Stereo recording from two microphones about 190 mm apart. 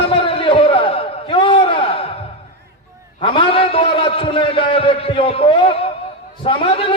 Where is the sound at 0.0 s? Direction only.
30° left (ahead or behind).